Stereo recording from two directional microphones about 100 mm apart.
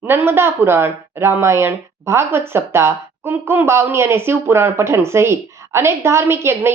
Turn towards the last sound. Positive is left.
turn(degrees=-25)  # may be behind; listen again after turning